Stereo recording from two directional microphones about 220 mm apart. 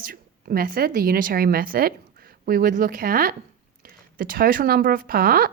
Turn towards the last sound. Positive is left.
turn(degrees=-40)  # may be behind; listen again after turning